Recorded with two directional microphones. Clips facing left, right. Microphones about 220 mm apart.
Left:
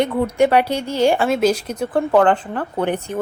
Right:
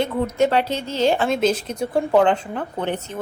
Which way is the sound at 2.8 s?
10° left (ahead or behind).